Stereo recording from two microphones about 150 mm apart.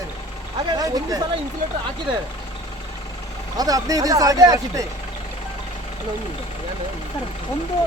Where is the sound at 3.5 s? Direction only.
25° right (ahead or behind).